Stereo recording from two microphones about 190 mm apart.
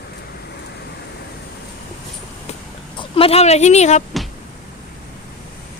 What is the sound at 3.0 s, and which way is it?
Speech, 30° left (ahead or behind).